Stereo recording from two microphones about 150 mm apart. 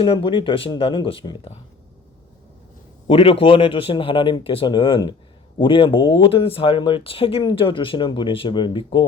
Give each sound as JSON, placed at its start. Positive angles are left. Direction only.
{"t": 0.0, "sound": "speech", "side_deg": 35}
{"t": 3.1, "sound": "speech", "side_deg": 40}